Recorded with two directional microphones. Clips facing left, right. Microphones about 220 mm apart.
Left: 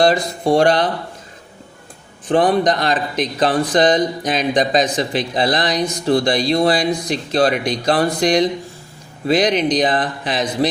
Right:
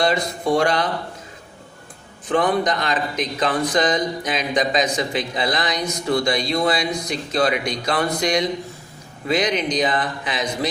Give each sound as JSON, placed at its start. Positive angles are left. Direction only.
{"t": 0.0, "sound": "speech", "side_deg": 35}
{"t": 2.3, "sound": "speech", "side_deg": 30}